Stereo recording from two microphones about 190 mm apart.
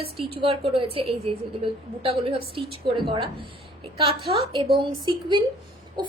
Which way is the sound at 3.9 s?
30° right (ahead or behind).